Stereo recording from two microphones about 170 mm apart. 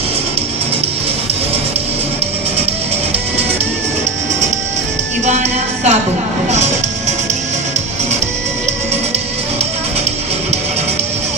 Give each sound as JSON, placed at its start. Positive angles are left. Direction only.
{"t": 5.2, "sound": "music", "side_deg": -40}